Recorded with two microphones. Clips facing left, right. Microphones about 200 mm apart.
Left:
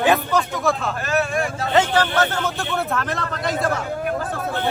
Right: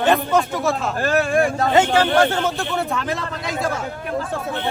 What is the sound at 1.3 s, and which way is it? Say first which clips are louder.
Speech: right 6 dB; 55° right (ahead or behind).